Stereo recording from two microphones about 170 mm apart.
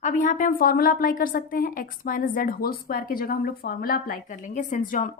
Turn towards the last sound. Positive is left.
turn(degrees=55)  # may be behind; listen again after turning